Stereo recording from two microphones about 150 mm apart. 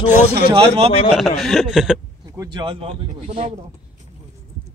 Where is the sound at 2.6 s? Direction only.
40° right (ahead or behind).